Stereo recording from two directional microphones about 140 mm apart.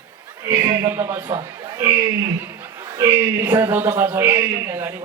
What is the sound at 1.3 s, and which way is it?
A man's voice, 25° right (ahead or behind).